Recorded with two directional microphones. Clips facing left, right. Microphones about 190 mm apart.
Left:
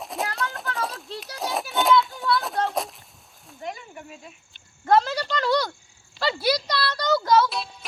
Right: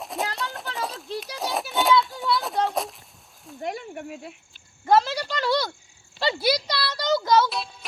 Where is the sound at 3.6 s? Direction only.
65° right (ahead or behind).